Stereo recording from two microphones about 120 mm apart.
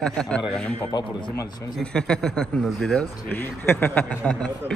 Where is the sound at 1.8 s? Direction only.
5° left (ahead or behind).